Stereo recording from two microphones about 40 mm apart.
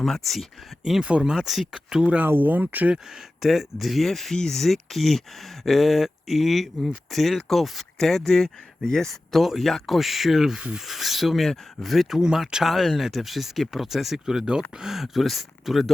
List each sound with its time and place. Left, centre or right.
0.0 s speech: centre
2.2 s speech: right
2.5 s speech: right
3.4 s speech: centre
9.3 s speech: centre